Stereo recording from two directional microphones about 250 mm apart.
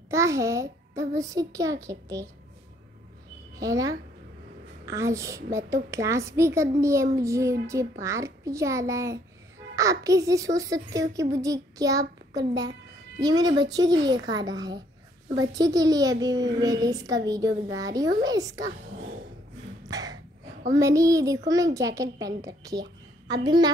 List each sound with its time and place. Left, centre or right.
0.1 s a woman's voice: centre
3.5 s a woman's voice: centre
19.9 s a sound: centre
20.7 s a woman's voice: centre